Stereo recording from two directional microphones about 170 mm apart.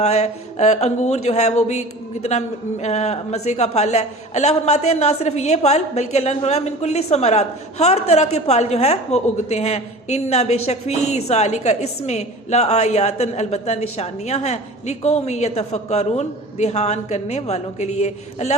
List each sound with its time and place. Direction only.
0.0 s speech: 40° left (ahead or behind)